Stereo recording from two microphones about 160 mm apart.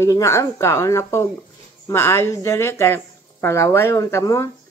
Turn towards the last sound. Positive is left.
turn(degrees=15)  # may be behind; listen again after turning